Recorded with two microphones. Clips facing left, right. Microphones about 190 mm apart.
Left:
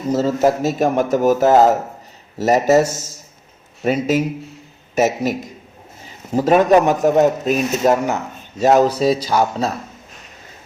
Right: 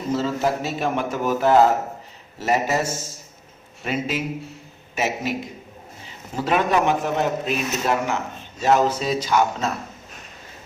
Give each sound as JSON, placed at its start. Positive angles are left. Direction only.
{"t": 0.1, "sound": "a man's voice", "side_deg": 40}
{"t": 3.8, "sound": "a man's voice", "side_deg": 40}
{"t": 6.3, "sound": "a man's voice", "side_deg": 40}